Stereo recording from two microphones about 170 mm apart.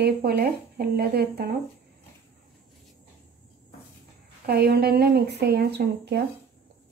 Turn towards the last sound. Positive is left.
turn(degrees=-80)